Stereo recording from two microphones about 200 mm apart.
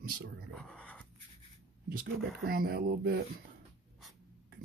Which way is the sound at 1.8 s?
50° right (ahead or behind).